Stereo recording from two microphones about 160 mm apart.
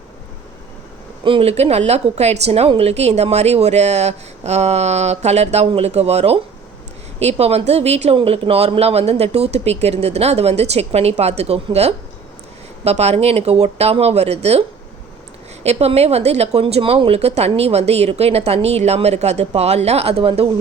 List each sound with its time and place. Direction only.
1.2 s a woman's voice: 35° right (ahead or behind)
15.6 s a woman's voice: 40° right (ahead or behind)